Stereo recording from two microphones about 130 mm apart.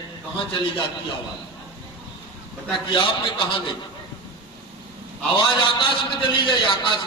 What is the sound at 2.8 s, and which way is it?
Speech, 40° left (ahead or behind).